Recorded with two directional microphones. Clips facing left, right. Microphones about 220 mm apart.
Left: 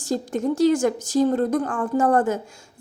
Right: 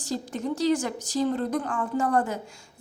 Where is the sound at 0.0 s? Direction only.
50° left (ahead or behind).